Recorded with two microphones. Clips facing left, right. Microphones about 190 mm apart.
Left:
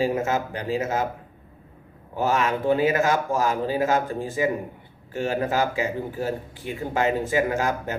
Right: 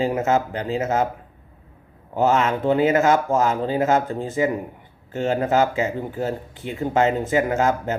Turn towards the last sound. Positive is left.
turn(degrees=-20)  # may be behind; listen again after turning